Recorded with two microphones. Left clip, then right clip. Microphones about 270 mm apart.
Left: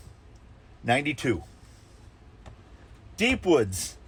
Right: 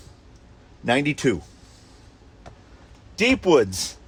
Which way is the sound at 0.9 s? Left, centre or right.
Right.